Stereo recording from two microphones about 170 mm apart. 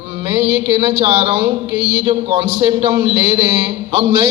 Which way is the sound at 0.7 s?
30° right (ahead or behind).